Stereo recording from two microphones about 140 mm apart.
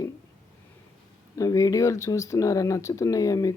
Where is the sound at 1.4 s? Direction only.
25° left (ahead or behind).